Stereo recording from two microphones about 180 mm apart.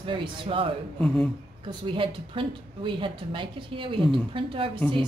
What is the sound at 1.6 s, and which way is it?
A woman's voice, 30° right (ahead or behind).